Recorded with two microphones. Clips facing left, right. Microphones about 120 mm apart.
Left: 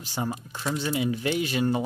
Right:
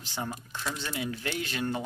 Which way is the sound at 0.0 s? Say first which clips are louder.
Left 5 dB; 10° left (ahead or behind).